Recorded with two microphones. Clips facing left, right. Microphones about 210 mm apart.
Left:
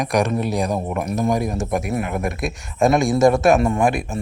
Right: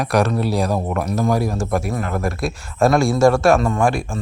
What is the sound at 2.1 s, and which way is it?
Speech, 20° left (ahead or behind).